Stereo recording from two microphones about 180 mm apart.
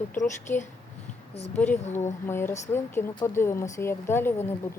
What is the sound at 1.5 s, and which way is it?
A woman's voice, 10° left (ahead or behind).